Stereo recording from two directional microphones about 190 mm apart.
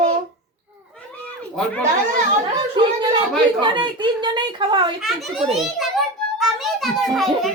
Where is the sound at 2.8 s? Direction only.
25° right (ahead or behind).